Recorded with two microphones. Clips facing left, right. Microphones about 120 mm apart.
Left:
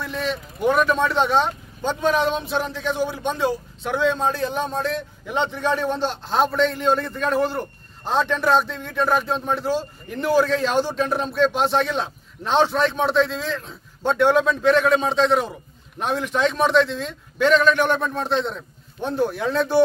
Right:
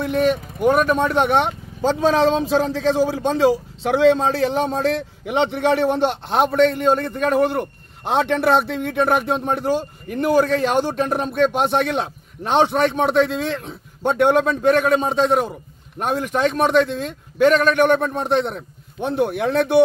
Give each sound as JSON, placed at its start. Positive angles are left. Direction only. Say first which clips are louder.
{"t": 0.0, "sound": "a man's voice", "louder": "right 8 dB", "side_deg": -55}